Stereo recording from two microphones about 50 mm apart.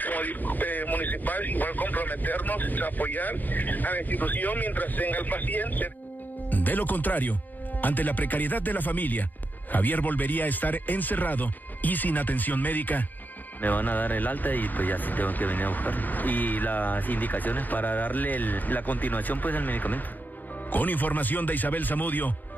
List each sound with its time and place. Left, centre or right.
0.0 s speech: left